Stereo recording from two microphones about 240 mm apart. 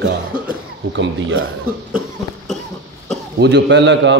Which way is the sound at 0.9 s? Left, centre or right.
Right.